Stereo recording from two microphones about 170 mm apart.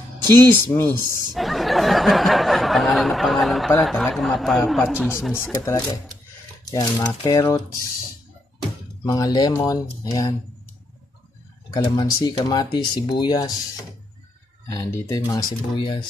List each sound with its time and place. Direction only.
0.4 s speech: 10° left (ahead or behind)
1.3 s a sound: centre (ahead or behind)
5.4 s speech: 20° left (ahead or behind)
6.6 s a sound: 25° left (ahead or behind)
7.0 s speech: 15° left (ahead or behind)
9.0 s speech: 25° left (ahead or behind)
11.7 s speech: 25° left (ahead or behind)
14.7 s speech: 20° left (ahead or behind)